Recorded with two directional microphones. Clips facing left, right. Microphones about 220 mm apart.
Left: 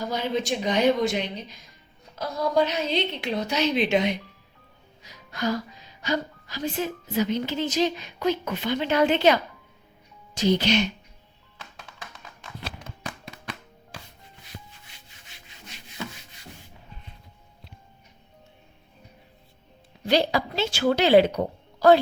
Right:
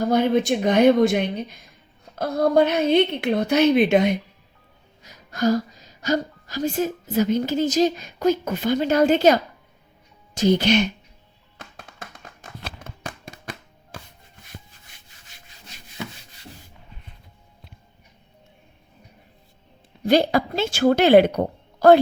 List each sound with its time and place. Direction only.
0.0 s a woman's voice: 55° right (ahead or behind)
11.5 s music: 50° right (ahead or behind)
20.1 s a woman's voice: 50° right (ahead or behind)